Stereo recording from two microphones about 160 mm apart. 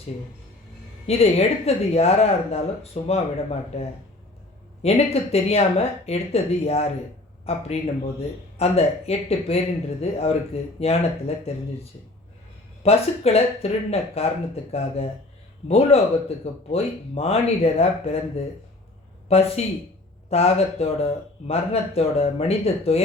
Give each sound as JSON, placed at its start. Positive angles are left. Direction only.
{"t": 1.0, "sound": "speech", "side_deg": 40}